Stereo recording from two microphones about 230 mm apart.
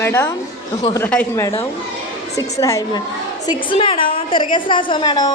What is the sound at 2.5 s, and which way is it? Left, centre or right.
A woman's voice, centre.